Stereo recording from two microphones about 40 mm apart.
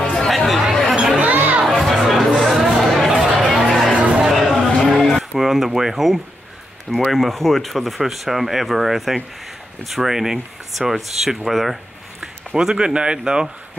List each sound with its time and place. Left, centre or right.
0.0 s chatter: centre
0.3 s chatter: centre
1.1 s a sound: right
1.8 s music: centre
2.3 s a sound: centre
3.2 s chatter: centre
3.9 s chatter: right
4.3 s a sound: centre
5.4 s speech: centre
12.5 s speech: right